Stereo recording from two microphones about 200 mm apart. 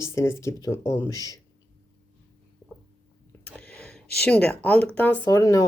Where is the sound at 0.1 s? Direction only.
15° left (ahead or behind).